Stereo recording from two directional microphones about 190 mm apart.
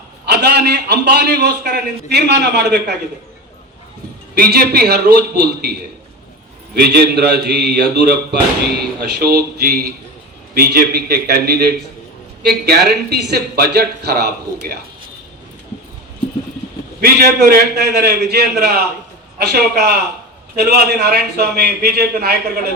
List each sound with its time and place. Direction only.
0.3 s speech: 60° right (ahead or behind)
4.4 s speech: 55° right (ahead or behind)
6.7 s speech: 55° right (ahead or behind)
17.0 s speech: 55° right (ahead or behind)